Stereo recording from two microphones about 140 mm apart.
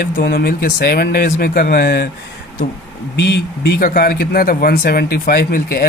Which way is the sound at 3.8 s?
90° left.